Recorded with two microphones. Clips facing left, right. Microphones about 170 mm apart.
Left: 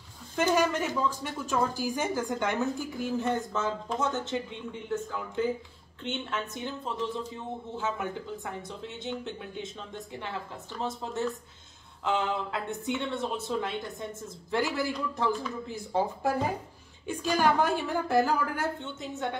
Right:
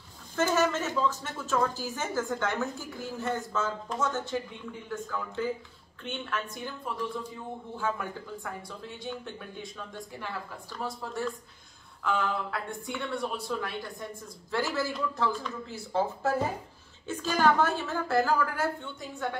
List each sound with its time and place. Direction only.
0.4 s a woman's voice: 15° left (ahead or behind)